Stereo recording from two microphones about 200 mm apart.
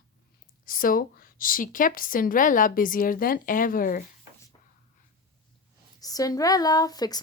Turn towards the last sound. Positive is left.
turn(degrees=20)  # may be behind; listen again after turning